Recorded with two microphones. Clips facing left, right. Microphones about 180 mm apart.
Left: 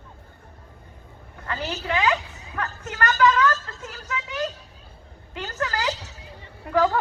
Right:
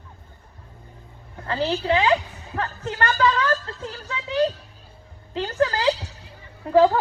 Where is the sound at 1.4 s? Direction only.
30° right (ahead or behind).